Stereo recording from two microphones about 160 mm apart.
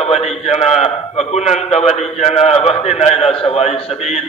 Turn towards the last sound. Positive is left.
turn(degrees=40)  # may be behind; listen again after turning